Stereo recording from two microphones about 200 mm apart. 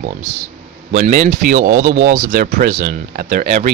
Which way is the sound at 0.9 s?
40° right (ahead or behind).